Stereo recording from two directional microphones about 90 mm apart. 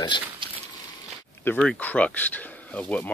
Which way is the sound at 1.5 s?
25° left (ahead or behind).